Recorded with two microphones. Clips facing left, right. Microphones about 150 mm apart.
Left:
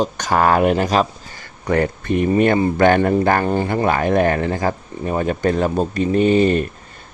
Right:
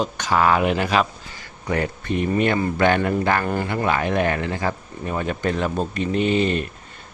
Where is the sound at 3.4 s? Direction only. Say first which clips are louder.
Left 5 dB; 30° left (ahead or behind).